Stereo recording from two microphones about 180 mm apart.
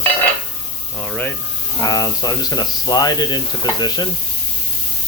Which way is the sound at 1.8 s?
20° left (ahead or behind).